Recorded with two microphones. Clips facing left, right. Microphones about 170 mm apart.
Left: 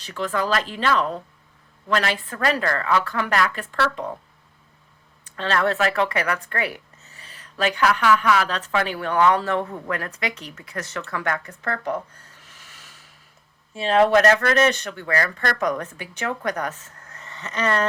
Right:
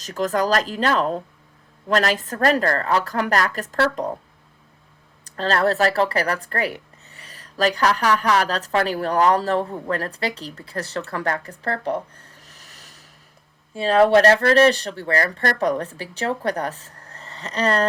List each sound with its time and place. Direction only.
0.0 s a woman's voice: 40° right (ahead or behind)
5.2 s a woman's voice: 35° right (ahead or behind)
12.4 s rub: 40° right (ahead or behind)
13.7 s a woman's voice: 35° right (ahead or behind)